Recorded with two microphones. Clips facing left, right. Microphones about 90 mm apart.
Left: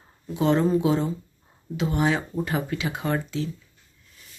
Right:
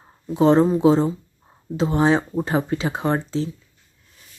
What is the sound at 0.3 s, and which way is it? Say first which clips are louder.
Speech: right 5 dB; 30° right (ahead or behind).